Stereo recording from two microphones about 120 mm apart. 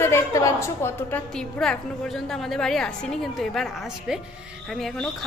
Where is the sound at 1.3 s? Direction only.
5° left (ahead or behind).